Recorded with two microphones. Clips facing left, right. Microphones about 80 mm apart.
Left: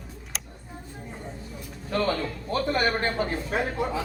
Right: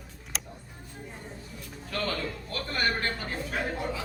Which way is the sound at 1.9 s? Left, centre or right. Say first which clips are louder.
Left 6 dB; left.